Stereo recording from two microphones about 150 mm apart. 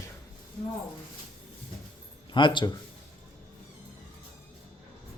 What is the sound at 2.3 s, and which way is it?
Speech, 30° left (ahead or behind).